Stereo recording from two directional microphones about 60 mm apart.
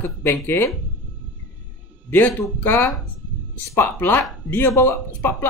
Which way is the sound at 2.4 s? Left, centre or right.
Left.